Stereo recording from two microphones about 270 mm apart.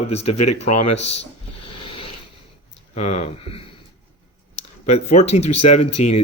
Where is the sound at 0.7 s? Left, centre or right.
Left.